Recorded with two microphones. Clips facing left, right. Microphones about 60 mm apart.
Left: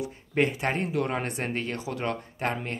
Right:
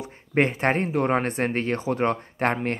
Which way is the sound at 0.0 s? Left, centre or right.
Right.